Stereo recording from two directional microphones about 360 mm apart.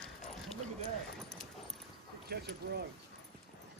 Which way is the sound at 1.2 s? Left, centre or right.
Centre.